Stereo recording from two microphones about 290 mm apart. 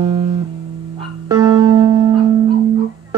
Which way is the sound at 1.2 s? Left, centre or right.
Centre.